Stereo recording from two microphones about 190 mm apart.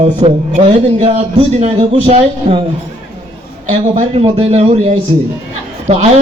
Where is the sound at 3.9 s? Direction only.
35° right (ahead or behind).